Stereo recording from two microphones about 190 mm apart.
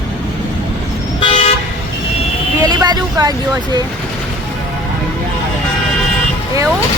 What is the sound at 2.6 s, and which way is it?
Speech, 20° right (ahead or behind).